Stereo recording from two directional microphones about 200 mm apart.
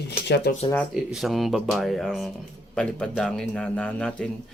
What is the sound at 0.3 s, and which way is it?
Speech, 60° left (ahead or behind).